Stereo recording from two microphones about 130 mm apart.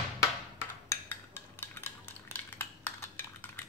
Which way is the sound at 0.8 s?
15° left (ahead or behind).